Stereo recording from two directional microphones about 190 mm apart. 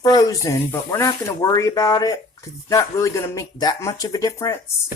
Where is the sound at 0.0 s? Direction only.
20° left (ahead or behind).